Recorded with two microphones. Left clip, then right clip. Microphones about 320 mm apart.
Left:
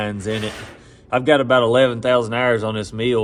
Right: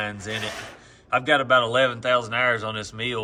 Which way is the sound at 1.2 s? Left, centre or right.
Centre.